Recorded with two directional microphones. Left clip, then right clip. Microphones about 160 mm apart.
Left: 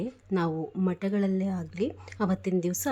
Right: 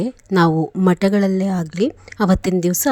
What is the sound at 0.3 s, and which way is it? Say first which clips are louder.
A woman's voice: right 14 dB; 50° right (ahead or behind).